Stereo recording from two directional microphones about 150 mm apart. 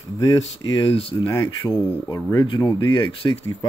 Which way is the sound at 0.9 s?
40° left (ahead or behind).